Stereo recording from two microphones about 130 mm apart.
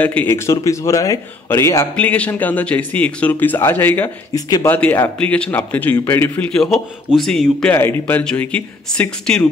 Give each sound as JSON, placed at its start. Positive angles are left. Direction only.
{"t": 0.0, "sound": "speech", "side_deg": 15}
{"t": 0.5, "sound": "a man's voice", "side_deg": 25}
{"t": 2.0, "sound": "speech", "side_deg": 10}
{"t": 4.3, "sound": "a man's voice", "side_deg": 30}
{"t": 4.6, "sound": "speech", "side_deg": 15}
{"t": 7.7, "sound": "speech", "side_deg": 15}